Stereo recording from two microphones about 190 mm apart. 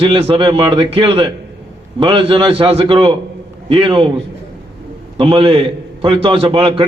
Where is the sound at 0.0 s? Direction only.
30° right (ahead or behind).